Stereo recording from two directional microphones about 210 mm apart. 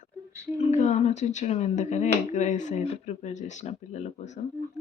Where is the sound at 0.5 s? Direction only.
35° left (ahead or behind).